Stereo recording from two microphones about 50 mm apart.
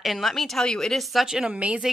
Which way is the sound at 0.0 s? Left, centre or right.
Centre.